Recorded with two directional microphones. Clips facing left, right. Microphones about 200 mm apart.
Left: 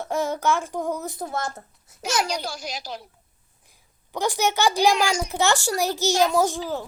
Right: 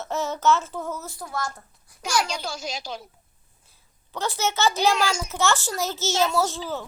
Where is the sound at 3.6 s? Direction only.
15° left (ahead or behind).